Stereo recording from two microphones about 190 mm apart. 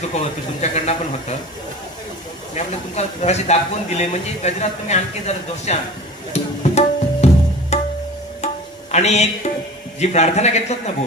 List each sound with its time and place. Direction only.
0.1 s speech: 35° left (ahead or behind)
2.5 s speech: 35° left (ahead or behind)
6.6 s tabla: 35° left (ahead or behind)
7.7 s music: 35° left (ahead or behind)
8.9 s speech: 35° left (ahead or behind)